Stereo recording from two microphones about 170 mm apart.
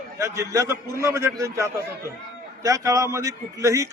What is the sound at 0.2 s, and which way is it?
A man's voice, 15° right (ahead or behind).